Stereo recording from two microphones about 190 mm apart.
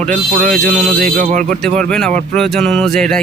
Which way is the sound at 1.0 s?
45° right (ahead or behind).